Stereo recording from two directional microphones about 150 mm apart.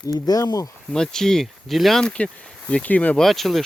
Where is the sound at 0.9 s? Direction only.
5° left (ahead or behind).